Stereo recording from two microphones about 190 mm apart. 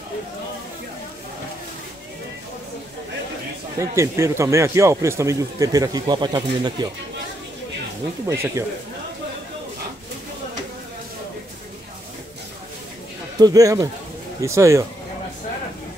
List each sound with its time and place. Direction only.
3.7 s a man's voice: 15° right (ahead or behind)
8.3 s a man's voice: 15° right (ahead or behind)
13.4 s a man's voice: 20° right (ahead or behind)